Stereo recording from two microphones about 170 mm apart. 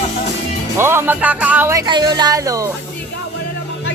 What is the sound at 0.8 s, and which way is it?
Speech, 15° right (ahead or behind).